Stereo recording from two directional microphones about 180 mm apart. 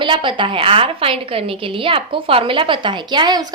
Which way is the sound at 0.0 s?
25° right (ahead or behind).